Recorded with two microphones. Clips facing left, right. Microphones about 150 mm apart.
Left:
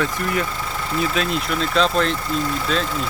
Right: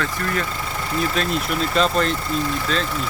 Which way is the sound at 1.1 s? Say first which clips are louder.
Even; centre (ahead or behind).